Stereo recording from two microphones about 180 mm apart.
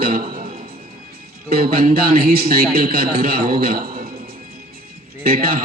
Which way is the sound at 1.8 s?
55° right (ahead or behind).